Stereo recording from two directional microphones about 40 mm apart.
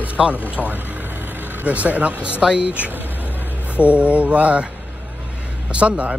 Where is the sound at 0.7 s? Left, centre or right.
Right.